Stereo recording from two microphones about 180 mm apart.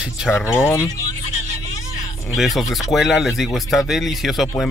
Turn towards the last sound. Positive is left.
turn(degrees=0)  # may be behind; listen again after turning